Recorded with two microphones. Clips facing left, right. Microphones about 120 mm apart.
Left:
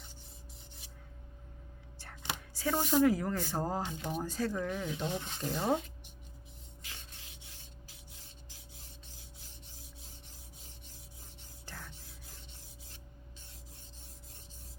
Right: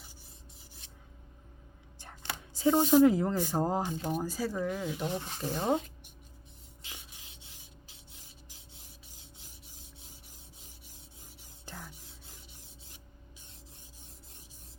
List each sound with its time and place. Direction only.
2.6 s a woman's voice: 20° right (ahead or behind)
6.8 s rub: 10° right (ahead or behind)
11.6 s whispering: 15° right (ahead or behind)